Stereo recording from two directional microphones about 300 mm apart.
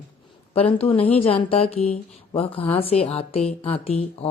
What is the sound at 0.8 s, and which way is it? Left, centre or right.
Speech, centre.